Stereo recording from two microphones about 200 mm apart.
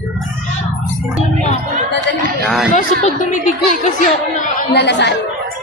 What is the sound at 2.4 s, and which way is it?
Speech, centre (ahead or behind).